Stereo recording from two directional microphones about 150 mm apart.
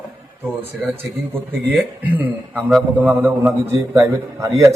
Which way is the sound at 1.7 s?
10° right (ahead or behind).